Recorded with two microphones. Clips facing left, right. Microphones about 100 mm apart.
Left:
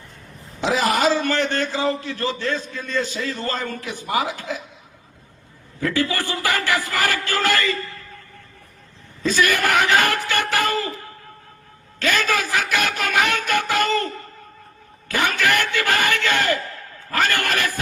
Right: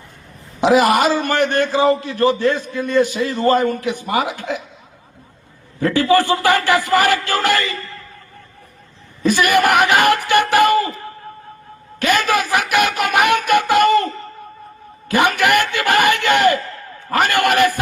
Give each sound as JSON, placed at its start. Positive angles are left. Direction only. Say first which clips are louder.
{"t": 0.6, "sound": "a woman's voice", "louder": "right 6 dB", "side_deg": -55}
{"t": 1.1, "sound": "a man's voice", "louder": "right 4 dB", "side_deg": -15}
{"t": 2.1, "sound": "a woman's voice", "louder": "right 10 dB", "side_deg": -55}
{"t": 2.7, "sound": "a man's voice", "louder": "right 9 dB", "side_deg": -15}
{"t": 4.0, "sound": "speech", "louder": "even", "side_deg": -65}
{"t": 5.8, "sound": "speech", "louder": "right 8 dB", "side_deg": -20}
{"t": 9.2, "sound": "speech", "louder": "right 5 dB", "side_deg": -15}
{"t": 11.9, "sound": "a woman's voice", "louder": "right 5 dB", "side_deg": -15}
{"t": 12.4, "sound": "music", "louder": "right 5 dB", "side_deg": -15}
{"t": 15.3, "sound": "music", "louder": "right 5 dB", "side_deg": -15}
{"t": 17.2, "sound": "a man's voice", "louder": "right 7 dB", "side_deg": -15}